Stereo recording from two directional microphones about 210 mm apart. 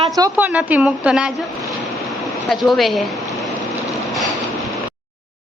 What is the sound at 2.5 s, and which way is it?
Speech, centre (ahead or behind).